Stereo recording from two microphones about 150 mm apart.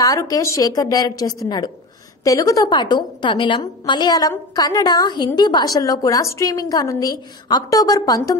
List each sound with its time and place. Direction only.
0.0 s a woman's voice: 25° left (ahead or behind)